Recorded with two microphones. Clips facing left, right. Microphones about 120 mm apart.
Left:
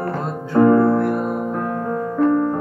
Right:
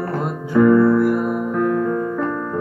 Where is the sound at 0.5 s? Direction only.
45° left (ahead or behind).